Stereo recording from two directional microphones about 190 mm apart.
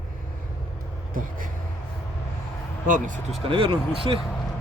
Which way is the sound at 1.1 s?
45° right (ahead or behind).